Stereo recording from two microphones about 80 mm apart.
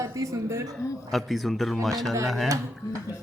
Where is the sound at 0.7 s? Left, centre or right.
Centre.